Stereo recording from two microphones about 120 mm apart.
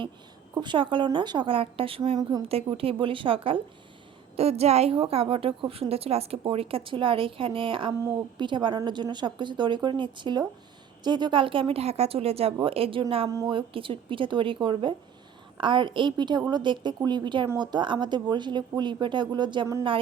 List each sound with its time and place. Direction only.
0.6 s a woman's voice: 40° right (ahead or behind)
4.4 s a woman's voice: 60° right (ahead or behind)
13.2 s a woman's voice: 30° right (ahead or behind)
13.5 s a woman's voice: 45° right (ahead or behind)